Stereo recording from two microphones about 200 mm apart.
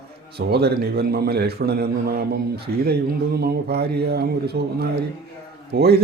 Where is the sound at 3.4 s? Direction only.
50° right (ahead or behind).